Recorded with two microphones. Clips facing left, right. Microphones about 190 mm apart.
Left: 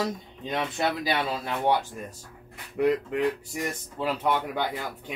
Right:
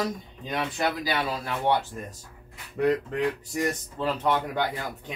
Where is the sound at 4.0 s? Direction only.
10° left (ahead or behind).